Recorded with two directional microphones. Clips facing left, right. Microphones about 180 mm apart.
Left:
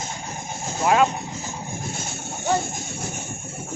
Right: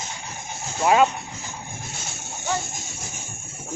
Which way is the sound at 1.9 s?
50° left (ahead or behind).